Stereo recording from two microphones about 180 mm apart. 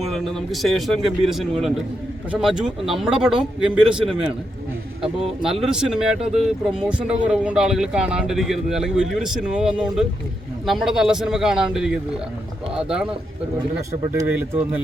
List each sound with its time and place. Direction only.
0.1 s speech: centre (ahead or behind)
5.1 s speech: 5° right (ahead or behind)
6.1 s speech: 35° right (ahead or behind)
6.4 s speech: 5° right (ahead or behind)
14.2 s speech: 15° right (ahead or behind)